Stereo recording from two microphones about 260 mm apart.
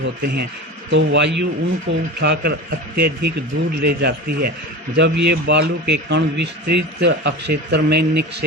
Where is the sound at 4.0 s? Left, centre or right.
Right.